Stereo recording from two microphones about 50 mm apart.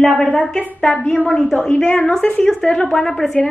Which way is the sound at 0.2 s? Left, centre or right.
Centre.